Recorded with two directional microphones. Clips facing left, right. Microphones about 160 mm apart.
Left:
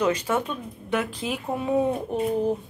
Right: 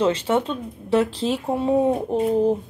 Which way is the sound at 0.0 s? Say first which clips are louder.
Right 4 dB; 30° right (ahead or behind).